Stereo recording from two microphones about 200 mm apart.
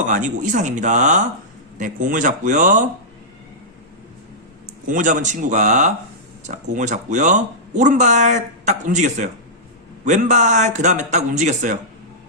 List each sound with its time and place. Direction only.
0.1 s speech: 40° right (ahead or behind)
4.9 s speech: 40° right (ahead or behind)